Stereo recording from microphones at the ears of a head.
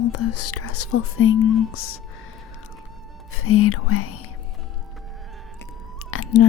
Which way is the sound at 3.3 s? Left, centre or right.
Left.